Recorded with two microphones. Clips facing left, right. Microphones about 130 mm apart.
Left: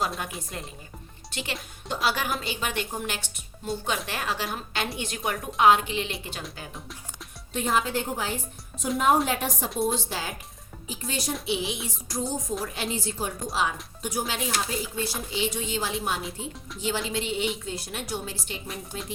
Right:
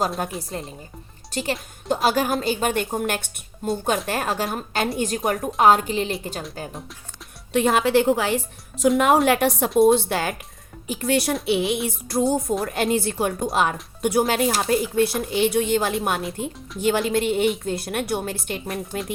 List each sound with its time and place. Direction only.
0.5 s speech: 35° right (ahead or behind)
7.5 s a woman's voice: 75° right (ahead or behind)